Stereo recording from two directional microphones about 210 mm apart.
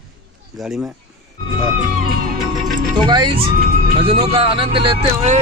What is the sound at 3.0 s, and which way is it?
Speech, 20° right (ahead or behind).